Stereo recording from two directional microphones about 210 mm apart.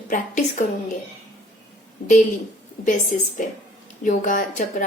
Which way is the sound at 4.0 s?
40° left (ahead or behind).